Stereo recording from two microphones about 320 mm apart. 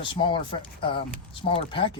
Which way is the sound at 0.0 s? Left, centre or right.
Centre.